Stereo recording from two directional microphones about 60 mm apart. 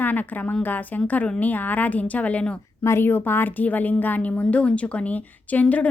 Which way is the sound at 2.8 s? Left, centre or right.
Left.